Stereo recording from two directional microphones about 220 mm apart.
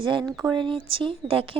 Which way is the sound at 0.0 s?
20° right (ahead or behind).